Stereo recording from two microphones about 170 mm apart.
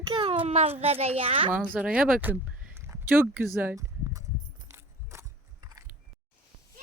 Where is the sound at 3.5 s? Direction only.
15° right (ahead or behind).